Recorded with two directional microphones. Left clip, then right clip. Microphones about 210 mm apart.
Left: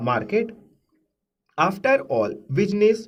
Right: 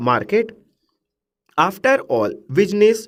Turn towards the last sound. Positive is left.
turn(degrees=-50)  # may be behind; listen again after turning